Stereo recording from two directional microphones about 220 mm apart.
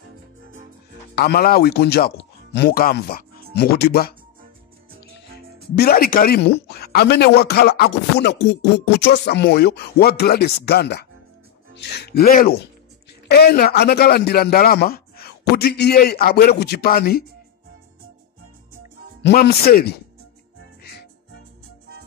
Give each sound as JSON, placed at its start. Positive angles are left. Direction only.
{"t": 1.1, "sound": "speech", "side_deg": 45}
{"t": 5.8, "sound": "speech", "side_deg": 45}
{"t": 19.2, "sound": "speech", "side_deg": 45}